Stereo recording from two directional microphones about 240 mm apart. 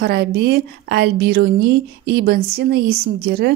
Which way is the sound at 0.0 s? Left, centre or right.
Right.